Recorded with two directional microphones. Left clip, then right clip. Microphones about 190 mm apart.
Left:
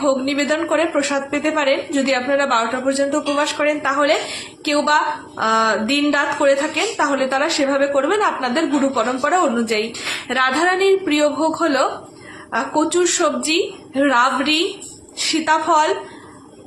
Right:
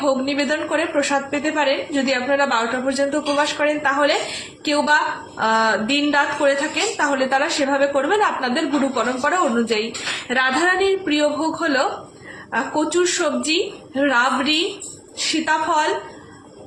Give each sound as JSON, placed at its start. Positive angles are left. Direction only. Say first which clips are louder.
{"t": 0.0, "sound": "a woman's voice", "louder": "left 1 dB", "side_deg": 20}